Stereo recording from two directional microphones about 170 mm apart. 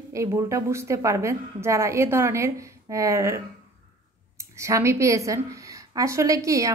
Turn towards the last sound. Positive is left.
turn(degrees=-20)  # may be behind; listen again after turning